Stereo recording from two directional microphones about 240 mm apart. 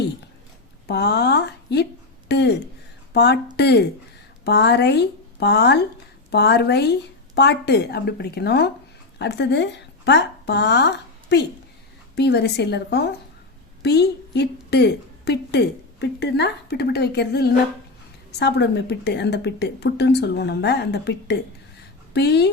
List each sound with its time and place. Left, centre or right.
0.9 s a woman's voice: left